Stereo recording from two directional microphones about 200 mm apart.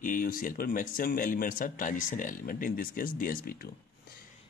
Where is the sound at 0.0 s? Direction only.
45° left (ahead or behind).